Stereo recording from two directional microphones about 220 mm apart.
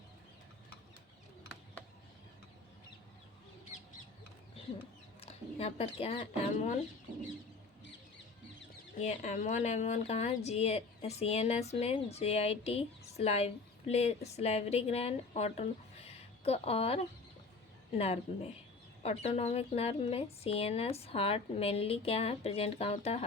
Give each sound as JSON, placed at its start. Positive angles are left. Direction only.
{"t": 5.2, "sound": "speech", "side_deg": 25}
{"t": 9.0, "sound": "a woman's voice", "side_deg": 30}